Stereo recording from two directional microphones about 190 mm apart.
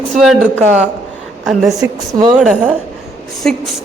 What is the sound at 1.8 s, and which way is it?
Speech, 20° right (ahead or behind).